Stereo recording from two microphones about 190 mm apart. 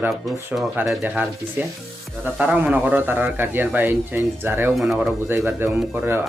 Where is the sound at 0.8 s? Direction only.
10° right (ahead or behind).